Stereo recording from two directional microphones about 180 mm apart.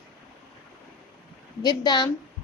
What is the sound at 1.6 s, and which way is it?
Speech, 25° left (ahead or behind).